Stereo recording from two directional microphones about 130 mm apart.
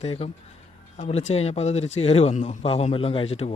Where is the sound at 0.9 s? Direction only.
60° left (ahead or behind).